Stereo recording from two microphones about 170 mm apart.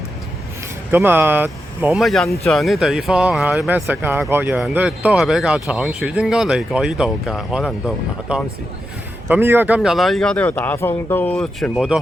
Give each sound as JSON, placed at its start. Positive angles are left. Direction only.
{"t": 0.9, "sound": "speech", "side_deg": -15}
{"t": 9.3, "sound": "speech", "side_deg": -15}
{"t": 11.7, "sound": "speech", "side_deg": -5}